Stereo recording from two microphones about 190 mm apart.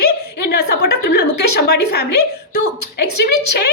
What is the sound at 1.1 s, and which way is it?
A woman's voice, 60° left (ahead or behind).